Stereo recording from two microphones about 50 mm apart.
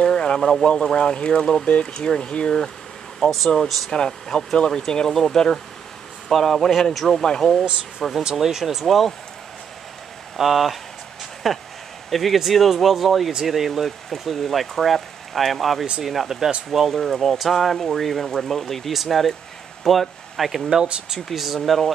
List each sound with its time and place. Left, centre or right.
0.0 s speech: centre
3.2 s speech: centre
3.9 s speech: centre
8.2 s speech: centre
8.8 s speech: centre
10.3 s speech: centre